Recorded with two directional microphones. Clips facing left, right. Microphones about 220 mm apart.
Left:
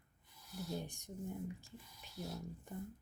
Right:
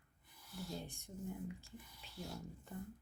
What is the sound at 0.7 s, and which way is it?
Speech, 15° left (ahead or behind).